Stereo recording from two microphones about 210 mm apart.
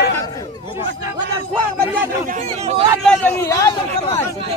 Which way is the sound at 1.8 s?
40° right (ahead or behind).